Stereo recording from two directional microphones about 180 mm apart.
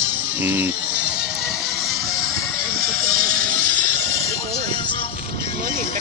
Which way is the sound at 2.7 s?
50° right (ahead or behind).